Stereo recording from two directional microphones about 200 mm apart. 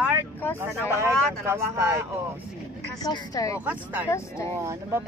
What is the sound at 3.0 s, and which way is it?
Speech, 20° left (ahead or behind).